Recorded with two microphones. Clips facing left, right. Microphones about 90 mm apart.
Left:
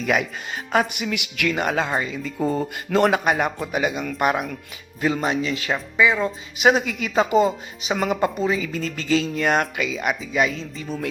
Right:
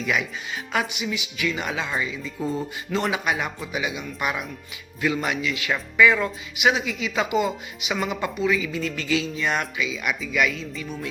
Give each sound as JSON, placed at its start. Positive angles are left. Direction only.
{"t": 0.0, "sound": "speech", "side_deg": 50}
{"t": 4.9, "sound": "speech", "side_deg": 40}
{"t": 6.0, "sound": "speech", "side_deg": 20}
{"t": 6.6, "sound": "speech", "side_deg": 45}
{"t": 9.3, "sound": "speech", "side_deg": 50}
{"t": 10.3, "sound": "speech", "side_deg": 30}